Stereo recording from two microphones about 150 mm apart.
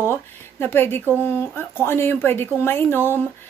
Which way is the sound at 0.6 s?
15° left (ahead or behind).